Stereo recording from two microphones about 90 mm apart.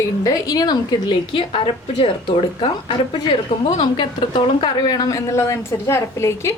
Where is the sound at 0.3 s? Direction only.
40° left (ahead or behind).